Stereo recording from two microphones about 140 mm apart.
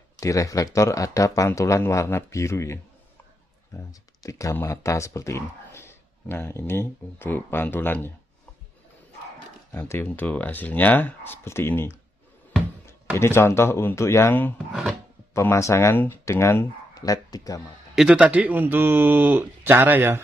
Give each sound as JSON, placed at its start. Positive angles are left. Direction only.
{"t": 0.2, "sound": "speech", "side_deg": 25}
{"t": 9.7, "sound": "speech", "side_deg": 20}
{"t": 14.7, "sound": "filing", "side_deg": 0}
{"t": 15.3, "sound": "speech", "side_deg": 20}
{"t": 17.9, "sound": "speech", "side_deg": -5}